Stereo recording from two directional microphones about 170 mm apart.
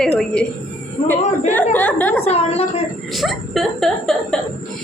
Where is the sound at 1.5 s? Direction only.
10° left (ahead or behind).